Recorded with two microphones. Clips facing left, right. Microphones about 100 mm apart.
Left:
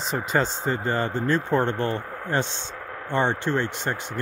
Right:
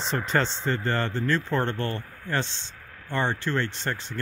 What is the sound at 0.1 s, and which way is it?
Speech, 10° left (ahead or behind).